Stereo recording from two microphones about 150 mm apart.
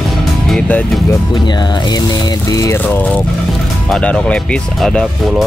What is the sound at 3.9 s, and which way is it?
Speech, 5° left (ahead or behind).